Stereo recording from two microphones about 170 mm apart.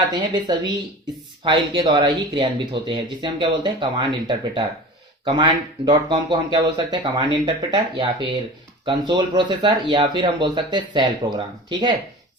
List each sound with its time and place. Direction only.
0.1 s speech: 25° right (ahead or behind)